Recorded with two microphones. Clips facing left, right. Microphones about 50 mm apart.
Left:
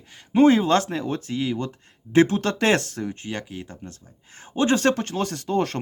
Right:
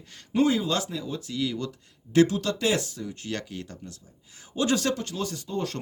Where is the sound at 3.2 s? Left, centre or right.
Centre.